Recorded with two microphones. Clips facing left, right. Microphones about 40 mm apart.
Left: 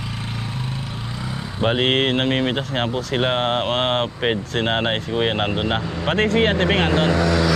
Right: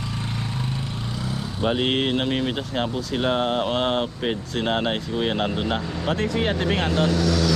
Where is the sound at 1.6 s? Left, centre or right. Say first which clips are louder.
Left 4 dB; left.